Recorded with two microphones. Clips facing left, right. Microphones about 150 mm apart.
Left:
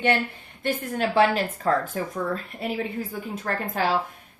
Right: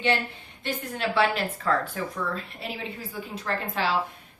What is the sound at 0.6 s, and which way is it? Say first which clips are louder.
A woman's voice: left 4 dB; 45° left (ahead or behind).